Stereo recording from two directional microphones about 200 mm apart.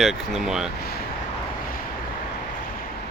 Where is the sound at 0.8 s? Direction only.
50° left (ahead or behind).